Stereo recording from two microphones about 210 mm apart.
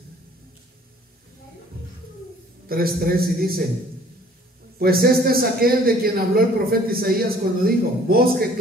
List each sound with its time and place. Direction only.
2.7 s a man's voice: 45° right (ahead or behind)
4.7 s a man's voice: 45° right (ahead or behind)